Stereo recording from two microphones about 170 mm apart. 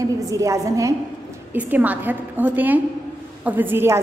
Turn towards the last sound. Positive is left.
turn(degrees=-15)  # may be behind; listen again after turning